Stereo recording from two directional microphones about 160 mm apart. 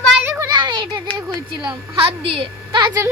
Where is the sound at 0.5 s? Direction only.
30° right (ahead or behind).